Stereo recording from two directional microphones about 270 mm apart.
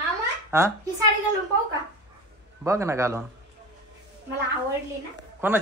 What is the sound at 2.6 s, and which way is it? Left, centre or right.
Speech, centre.